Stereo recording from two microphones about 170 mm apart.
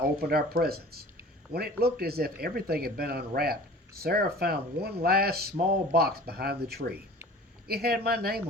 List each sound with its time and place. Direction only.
0.0 s speech: 65° right (ahead or behind)